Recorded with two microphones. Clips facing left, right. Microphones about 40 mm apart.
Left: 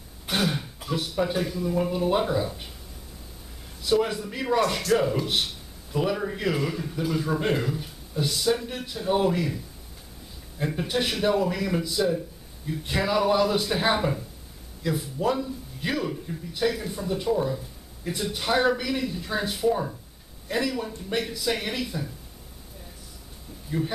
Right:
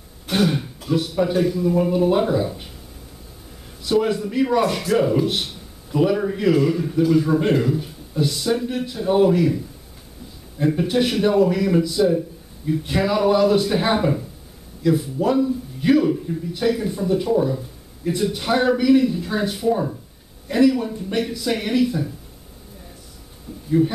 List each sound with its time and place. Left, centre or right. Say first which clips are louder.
0.3 s a man's voice: right 6 dB; centre
3.8 s a man's voice: right 4 dB; centre
10.6 s a man's voice: right 8 dB; centre